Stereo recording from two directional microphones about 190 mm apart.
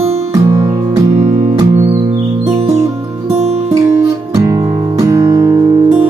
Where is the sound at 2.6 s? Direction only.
35° right (ahead or behind).